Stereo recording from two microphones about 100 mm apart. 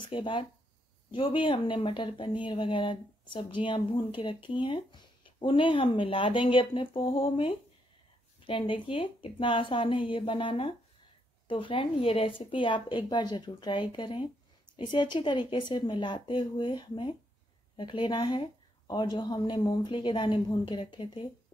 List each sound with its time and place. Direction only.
0.0 s a woman's voice: 55° left (ahead or behind)